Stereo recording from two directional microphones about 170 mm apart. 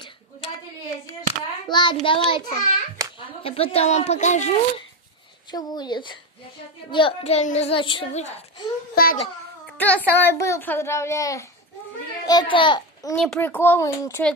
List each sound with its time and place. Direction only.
0.0 s a sound: 30° left (ahead or behind)
1.7 s child singing: 25° left (ahead or behind)
3.0 s a sound: 20° right (ahead or behind)
3.4 s a child's voice: 35° left (ahead or behind)
5.5 s child singing: 25° left (ahead or behind)
6.9 s a child's voice: 30° left (ahead or behind)
8.9 s a child's voice: 60° left (ahead or behind)
9.8 s a child's voice: 10° left (ahead or behind); by 13.1 s 25° left (ahead or behind)
13.1 s a child's voice: 5° left (ahead or behind)